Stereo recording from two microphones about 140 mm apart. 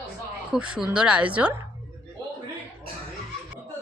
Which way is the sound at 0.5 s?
5° right (ahead or behind).